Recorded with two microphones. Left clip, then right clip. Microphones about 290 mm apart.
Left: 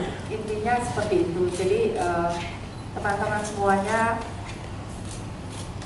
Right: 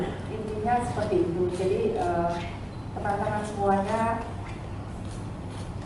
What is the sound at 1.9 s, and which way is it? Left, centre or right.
Music, right.